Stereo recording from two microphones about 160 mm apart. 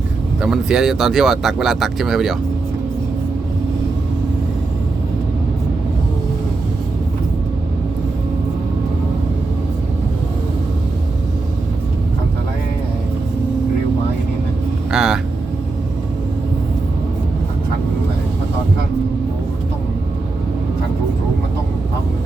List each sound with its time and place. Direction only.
0.4 s speech: 5° right (ahead or behind)
14.8 s vehicle: 5° right (ahead or behind)